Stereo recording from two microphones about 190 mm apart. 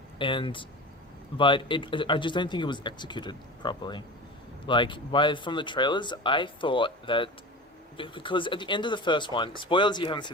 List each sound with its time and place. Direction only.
0.2 s speech: 25° left (ahead or behind)